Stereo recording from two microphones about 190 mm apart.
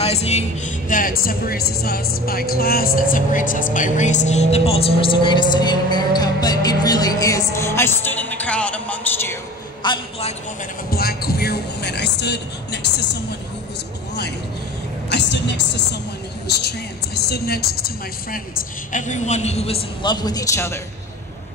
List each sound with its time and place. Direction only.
0.0 s speech: 30° left (ahead or behind); by 9.4 s 10° left (ahead or behind)
9.8 s speech: 25° left (ahead or behind)
10.9 s speech: 55° left (ahead or behind)
15.0 s a woman's voice: 65° left (ahead or behind)
18.9 s a man's voice: 40° left (ahead or behind); by 20.8 s 15° left (ahead or behind)